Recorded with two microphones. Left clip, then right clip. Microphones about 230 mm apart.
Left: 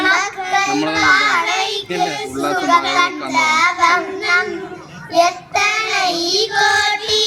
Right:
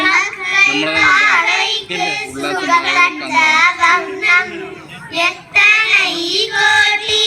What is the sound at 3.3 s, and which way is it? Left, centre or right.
Child singing, left.